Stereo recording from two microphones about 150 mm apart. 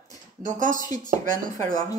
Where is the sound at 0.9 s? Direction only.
25° left (ahead or behind).